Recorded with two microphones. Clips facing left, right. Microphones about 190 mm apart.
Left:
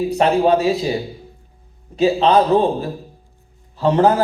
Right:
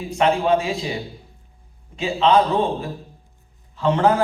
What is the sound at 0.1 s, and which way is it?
Speech, 40° left (ahead or behind).